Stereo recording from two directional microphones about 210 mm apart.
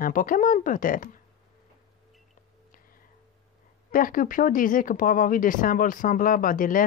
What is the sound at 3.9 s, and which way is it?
Speech, 40° left (ahead or behind).